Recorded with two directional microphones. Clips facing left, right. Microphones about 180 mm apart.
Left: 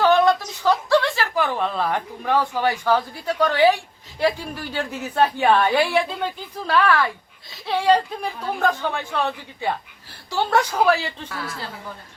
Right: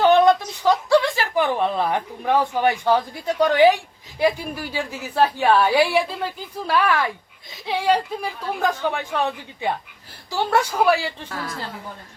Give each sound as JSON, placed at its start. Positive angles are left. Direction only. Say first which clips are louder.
{"t": 0.0, "sound": "a woman's voice", "louder": "right 2 dB", "side_deg": -20}
{"t": 10.3, "sound": "a woman's voice", "louder": "even", "side_deg": -5}